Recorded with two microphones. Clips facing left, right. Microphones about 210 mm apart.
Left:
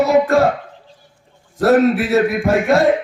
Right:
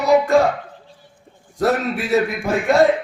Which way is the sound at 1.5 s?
Centre (ahead or behind).